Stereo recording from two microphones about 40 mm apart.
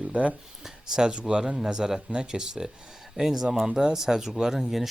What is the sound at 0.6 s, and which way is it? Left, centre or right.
Speech, centre.